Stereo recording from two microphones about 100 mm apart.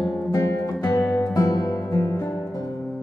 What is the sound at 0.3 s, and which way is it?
Music, 35° left (ahead or behind).